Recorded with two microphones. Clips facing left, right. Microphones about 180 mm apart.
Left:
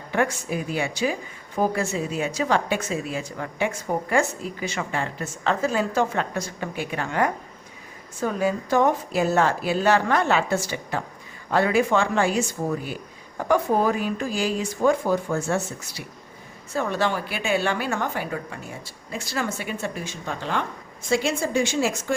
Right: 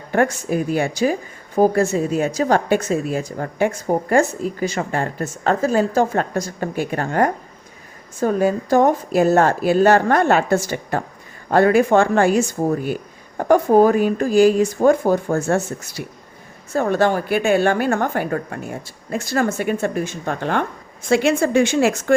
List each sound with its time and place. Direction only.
0.1 s a woman's voice: 45° right (ahead or behind)